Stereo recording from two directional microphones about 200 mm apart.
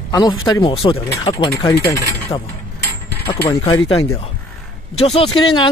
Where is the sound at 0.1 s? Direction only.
20° left (ahead or behind).